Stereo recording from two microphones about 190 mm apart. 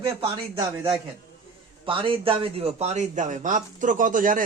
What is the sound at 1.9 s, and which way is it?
A man's voice, 30° right (ahead or behind).